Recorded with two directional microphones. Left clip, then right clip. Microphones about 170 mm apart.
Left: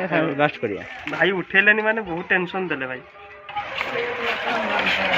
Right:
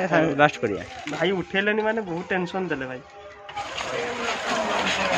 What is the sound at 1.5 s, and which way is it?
Speech, 20° right (ahead or behind).